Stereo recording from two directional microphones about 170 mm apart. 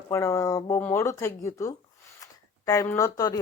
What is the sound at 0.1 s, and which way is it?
Speech, 20° left (ahead or behind).